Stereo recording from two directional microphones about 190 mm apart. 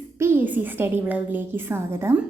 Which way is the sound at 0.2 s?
10° right (ahead or behind).